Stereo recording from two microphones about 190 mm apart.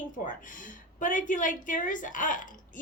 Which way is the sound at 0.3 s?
45° left (ahead or behind).